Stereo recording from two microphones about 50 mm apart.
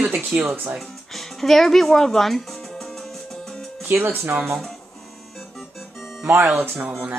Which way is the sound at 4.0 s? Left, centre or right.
Right.